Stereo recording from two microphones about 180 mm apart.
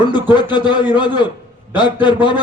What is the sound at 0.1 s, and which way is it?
A man's voice, 25° left (ahead or behind).